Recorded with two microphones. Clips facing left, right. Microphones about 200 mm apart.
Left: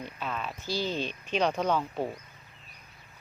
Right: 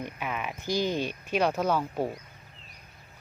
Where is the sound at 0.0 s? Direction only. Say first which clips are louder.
Right 2 dB; 15° right (ahead or behind).